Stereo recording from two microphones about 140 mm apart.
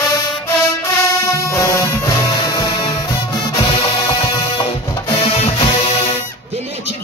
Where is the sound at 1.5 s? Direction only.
20° left (ahead or behind).